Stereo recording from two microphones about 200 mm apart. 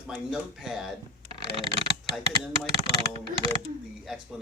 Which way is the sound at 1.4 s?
25° right (ahead or behind).